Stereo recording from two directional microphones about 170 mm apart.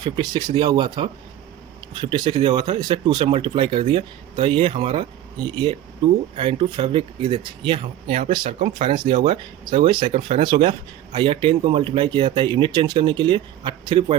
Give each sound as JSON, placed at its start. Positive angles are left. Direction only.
{"t": 0.0, "sound": "speech", "side_deg": -25}
{"t": 6.3, "sound": "speech", "side_deg": -30}
{"t": 9.1, "sound": "speech", "side_deg": -45}
{"t": 9.6, "sound": "speech", "side_deg": -30}